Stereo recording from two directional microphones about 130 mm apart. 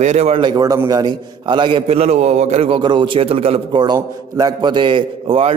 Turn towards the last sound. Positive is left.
turn(degrees=-45)  # may be behind; listen again after turning